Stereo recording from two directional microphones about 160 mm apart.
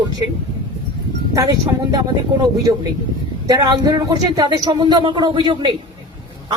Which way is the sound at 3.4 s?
25° right (ahead or behind).